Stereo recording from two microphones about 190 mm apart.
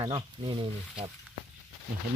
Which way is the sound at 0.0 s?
30° right (ahead or behind).